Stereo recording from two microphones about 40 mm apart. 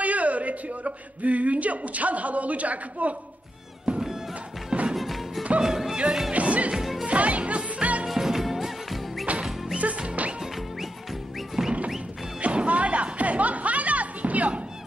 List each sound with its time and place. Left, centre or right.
0.0 s speech: right
4.0 s music: centre
4.9 s music: centre
5.6 s music: centre
6.3 s music: right
6.7 s music: centre
7.1 s music: right
8.1 s music: centre
9.2 s music: right
9.5 s music: centre
9.8 s music: right
10.4 s music: centre
12.4 s music: right